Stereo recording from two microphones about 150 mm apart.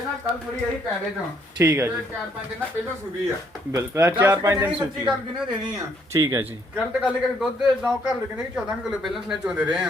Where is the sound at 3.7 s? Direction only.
20° right (ahead or behind).